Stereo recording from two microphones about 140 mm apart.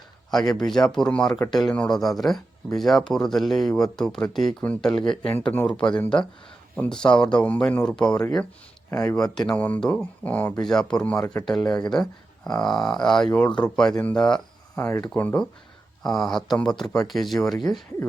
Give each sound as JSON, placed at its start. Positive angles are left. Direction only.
{"t": 0.3, "sound": "speech", "side_deg": 5}
{"t": 8.9, "sound": "speech", "side_deg": 20}
{"t": 9.1, "sound": "speech", "side_deg": 5}
{"t": 14.8, "sound": "speech", "side_deg": 15}